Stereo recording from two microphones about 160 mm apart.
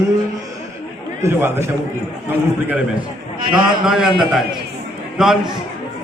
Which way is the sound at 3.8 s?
5° right (ahead or behind).